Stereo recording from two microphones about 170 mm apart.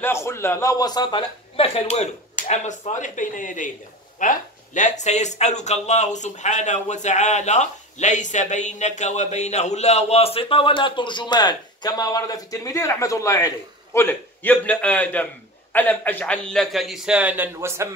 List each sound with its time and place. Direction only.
0.0 s a man's voice: 15° left (ahead or behind)
1.9 s a man's voice: 45° left (ahead or behind); by 17.8 s 15° right (ahead or behind)